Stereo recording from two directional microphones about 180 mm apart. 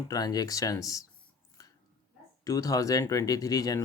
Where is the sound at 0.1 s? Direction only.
20° left (ahead or behind).